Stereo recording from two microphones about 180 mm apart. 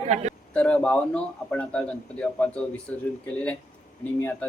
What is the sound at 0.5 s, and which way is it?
Speech, 5° left (ahead or behind).